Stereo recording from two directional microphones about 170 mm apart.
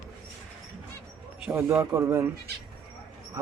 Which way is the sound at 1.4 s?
15° right (ahead or behind).